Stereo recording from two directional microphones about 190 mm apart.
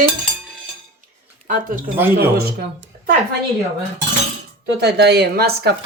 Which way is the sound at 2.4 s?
55° right (ahead or behind).